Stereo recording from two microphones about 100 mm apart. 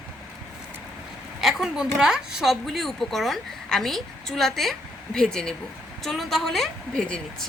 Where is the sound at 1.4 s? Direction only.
5° right (ahead or behind).